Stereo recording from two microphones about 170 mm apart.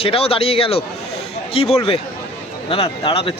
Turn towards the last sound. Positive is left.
turn(degrees=30)  # may be behind; listen again after turning